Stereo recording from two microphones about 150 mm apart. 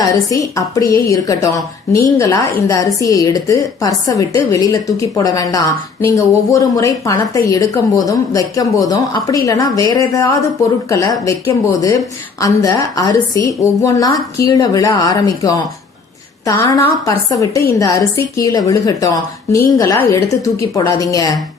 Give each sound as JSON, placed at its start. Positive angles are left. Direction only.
{"t": 0.0, "sound": "a woman's voice", "side_deg": 20}